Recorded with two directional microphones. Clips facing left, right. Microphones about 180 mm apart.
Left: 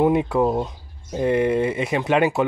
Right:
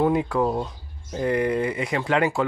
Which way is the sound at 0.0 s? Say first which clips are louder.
Left 3 dB; 20° left (ahead or behind).